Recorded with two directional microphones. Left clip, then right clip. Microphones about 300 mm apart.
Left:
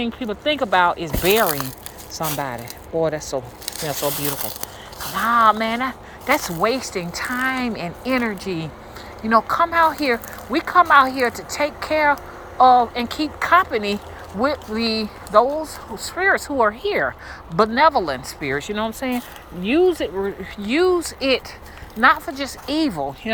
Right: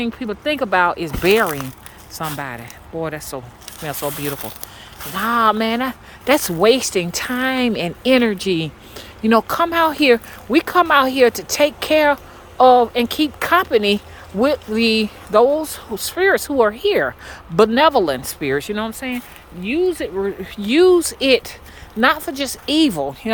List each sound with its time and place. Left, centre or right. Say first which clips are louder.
0.1 s speech: even; centre
1.5 s speech: left 1 dB; left
2.1 s speech: left 1 dB; centre
4.3 s speech: right 1 dB; left
5.1 s speech: left 1 dB; centre
20.1 s speech: right 3 dB; centre